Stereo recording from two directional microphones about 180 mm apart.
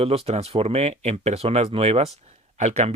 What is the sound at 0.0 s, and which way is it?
Speech, 35° right (ahead or behind).